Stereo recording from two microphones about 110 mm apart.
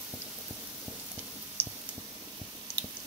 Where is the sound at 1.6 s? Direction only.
20° right (ahead or behind).